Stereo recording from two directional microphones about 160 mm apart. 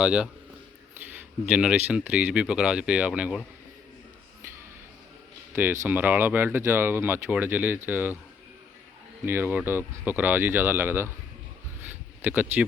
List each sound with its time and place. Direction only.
0.0 s a man's voice: 5° right (ahead or behind)
1.5 s speech: 5° right (ahead or behind)
5.5 s speech: 10° right (ahead or behind)
9.2 s speech: 15° right (ahead or behind)
11.8 s a sound: 10° right (ahead or behind)